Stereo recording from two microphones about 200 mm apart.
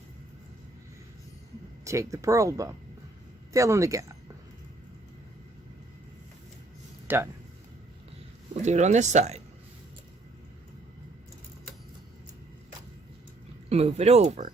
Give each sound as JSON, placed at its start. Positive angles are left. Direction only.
{"t": 1.8, "sound": "speech", "side_deg": -15}
{"t": 7.1, "sound": "speech", "side_deg": -10}
{"t": 8.6, "sound": "speech", "side_deg": -35}
{"t": 13.7, "sound": "speech", "side_deg": -30}